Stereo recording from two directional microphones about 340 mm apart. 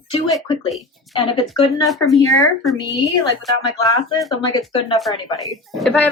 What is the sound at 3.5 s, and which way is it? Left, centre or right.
Speech, centre.